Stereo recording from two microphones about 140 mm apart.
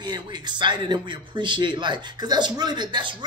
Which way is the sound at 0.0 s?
30° right (ahead or behind).